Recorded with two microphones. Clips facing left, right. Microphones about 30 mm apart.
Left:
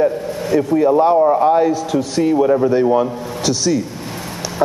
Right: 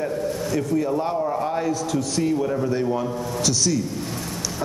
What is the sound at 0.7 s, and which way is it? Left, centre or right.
A man's voice, left.